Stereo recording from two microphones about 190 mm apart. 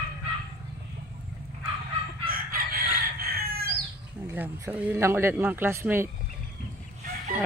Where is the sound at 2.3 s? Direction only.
50° right (ahead or behind).